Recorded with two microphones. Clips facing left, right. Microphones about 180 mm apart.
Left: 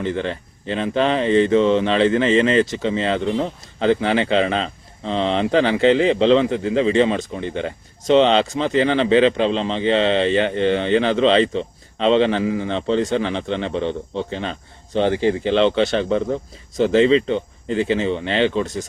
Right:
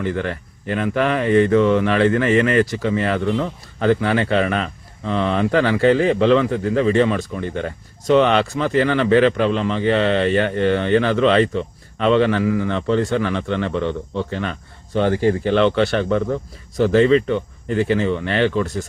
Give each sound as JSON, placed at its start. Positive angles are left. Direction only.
{"t": 0.0, "sound": "speech", "side_deg": 20}